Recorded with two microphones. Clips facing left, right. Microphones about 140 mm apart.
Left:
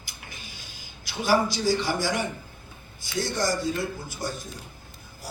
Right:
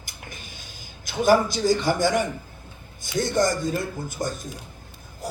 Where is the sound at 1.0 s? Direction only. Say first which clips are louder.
Right 4 dB; 50° right (ahead or behind).